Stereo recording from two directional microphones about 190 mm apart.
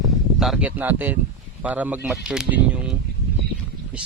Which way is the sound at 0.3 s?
Centre (ahead or behind).